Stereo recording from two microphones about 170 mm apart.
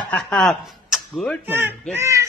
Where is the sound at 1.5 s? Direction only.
10° right (ahead or behind).